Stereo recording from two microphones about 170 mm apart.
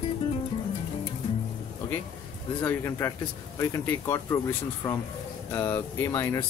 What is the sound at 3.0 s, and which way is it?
Speech, 10° left (ahead or behind).